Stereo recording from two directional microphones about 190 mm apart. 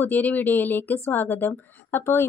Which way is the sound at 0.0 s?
10° left (ahead or behind).